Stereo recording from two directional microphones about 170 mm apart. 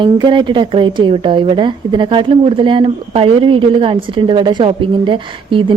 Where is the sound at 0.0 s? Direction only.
30° right (ahead or behind).